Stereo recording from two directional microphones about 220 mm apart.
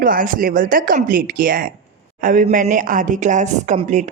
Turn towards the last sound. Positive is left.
turn(degrees=-35)  # may be behind; listen again after turning